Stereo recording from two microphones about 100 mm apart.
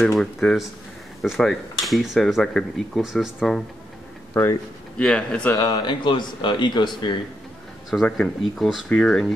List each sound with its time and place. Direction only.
0.0 s speech: 5° left (ahead or behind)
4.3 s speech: 25° left (ahead or behind)
4.9 s a man's voice: 10° left (ahead or behind)
5.6 s speech: 45° left (ahead or behind)
7.9 s a man's voice: 5° left (ahead or behind)